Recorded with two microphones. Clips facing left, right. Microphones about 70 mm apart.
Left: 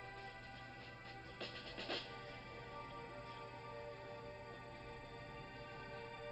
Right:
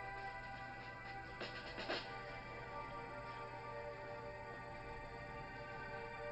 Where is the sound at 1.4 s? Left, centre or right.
Right.